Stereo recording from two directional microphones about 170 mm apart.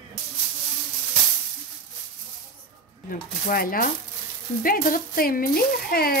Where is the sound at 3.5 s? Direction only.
60° left (ahead or behind).